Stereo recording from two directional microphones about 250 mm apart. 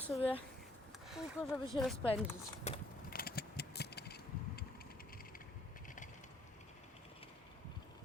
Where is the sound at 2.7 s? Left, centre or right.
Left.